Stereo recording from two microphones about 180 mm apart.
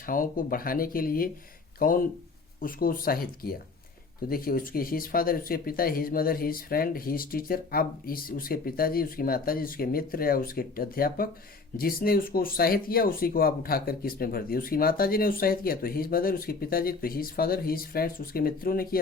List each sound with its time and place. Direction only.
0.0 s speech: 50° left (ahead or behind)